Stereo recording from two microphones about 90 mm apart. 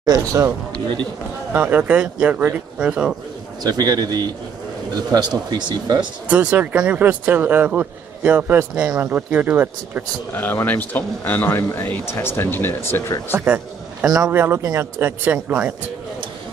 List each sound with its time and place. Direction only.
0.1 s speech: 35° right (ahead or behind)
1.5 s speech: 20° right (ahead or behind)
3.6 s speech: 45° right (ahead or behind)
6.2 s speech: 15° right (ahead or behind)
10.3 s speech: 25° left (ahead or behind)
13.5 s speech: 10° right (ahead or behind)
14.3 s speech: 25° right (ahead or behind)
15.0 s speech: 20° right (ahead or behind)